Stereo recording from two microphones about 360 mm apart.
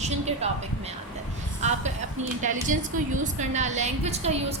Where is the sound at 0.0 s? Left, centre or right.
Centre.